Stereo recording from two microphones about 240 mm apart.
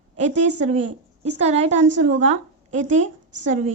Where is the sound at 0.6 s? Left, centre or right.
Right.